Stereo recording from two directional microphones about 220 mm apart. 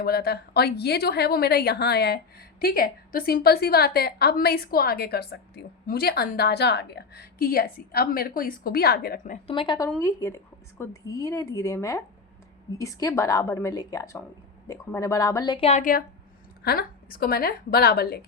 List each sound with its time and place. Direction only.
0.0 s a woman's voice: 45° left (ahead or behind)
9.5 s a woman's voice: 20° left (ahead or behind); by 18.3 s 45° left (ahead or behind)